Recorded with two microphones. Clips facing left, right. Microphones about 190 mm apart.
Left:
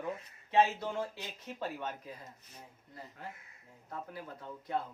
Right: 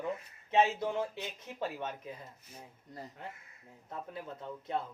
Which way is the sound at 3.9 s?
20° right (ahead or behind).